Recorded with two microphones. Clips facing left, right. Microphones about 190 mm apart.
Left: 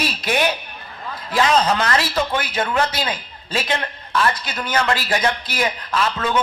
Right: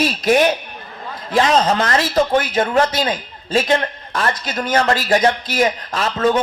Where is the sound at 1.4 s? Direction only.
30° right (ahead or behind).